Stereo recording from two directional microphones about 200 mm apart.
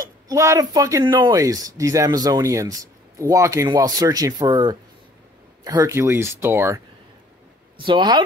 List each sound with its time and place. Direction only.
0.0 s speech: 15° right (ahead or behind)
7.8 s speech: 25° right (ahead or behind)